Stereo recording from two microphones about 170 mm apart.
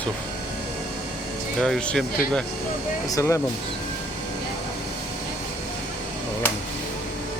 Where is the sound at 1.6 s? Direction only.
5° left (ahead or behind).